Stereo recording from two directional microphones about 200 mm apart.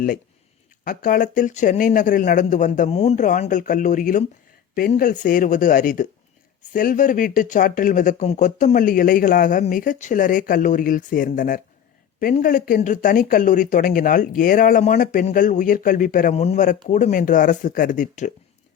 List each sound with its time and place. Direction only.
0.9 s speech: 45° left (ahead or behind)